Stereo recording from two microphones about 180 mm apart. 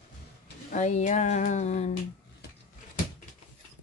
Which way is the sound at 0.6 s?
40° left (ahead or behind).